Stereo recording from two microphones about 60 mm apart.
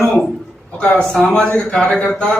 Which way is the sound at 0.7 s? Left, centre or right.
Centre.